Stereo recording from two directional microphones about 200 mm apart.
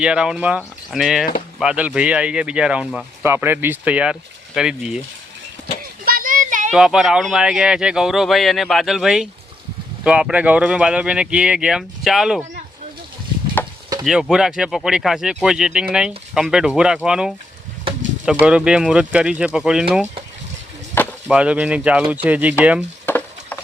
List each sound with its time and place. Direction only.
0.0 s speech: 5° right (ahead or behind)
6.1 s a sound: 45° right (ahead or behind)
6.7 s speech: 5° right (ahead or behind)
14.0 s speech: 5° right (ahead or behind)
18.4 s speech: 5° right (ahead or behind)
20.9 s chop: 10° left (ahead or behind)
21.2 s speech: 5° right (ahead or behind)
23.0 s chopping: 10° left (ahead or behind)